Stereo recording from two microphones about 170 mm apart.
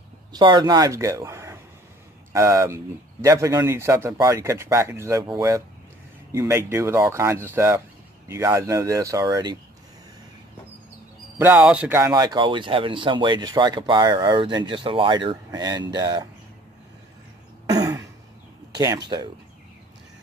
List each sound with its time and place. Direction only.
0.3 s speech: 25° right (ahead or behind)
11.3 s speech: 10° right (ahead or behind)
12.1 s speech: 25° right (ahead or behind)
17.6 s throat clearing: 20° right (ahead or behind)
18.8 s speech: 20° right (ahead or behind)